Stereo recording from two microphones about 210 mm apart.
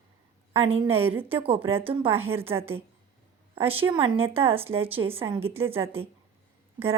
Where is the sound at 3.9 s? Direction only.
25° right (ahead or behind).